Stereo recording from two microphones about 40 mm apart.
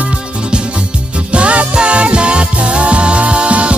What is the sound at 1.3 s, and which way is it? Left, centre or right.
Music, right.